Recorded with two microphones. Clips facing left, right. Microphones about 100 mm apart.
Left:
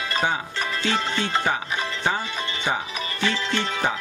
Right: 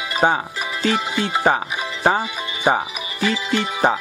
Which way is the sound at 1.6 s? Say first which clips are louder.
Right 5 dB; 10° right (ahead or behind).